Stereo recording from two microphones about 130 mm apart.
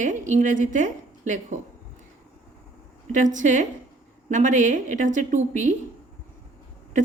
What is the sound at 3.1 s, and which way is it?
A woman's voice, 75° right (ahead or behind).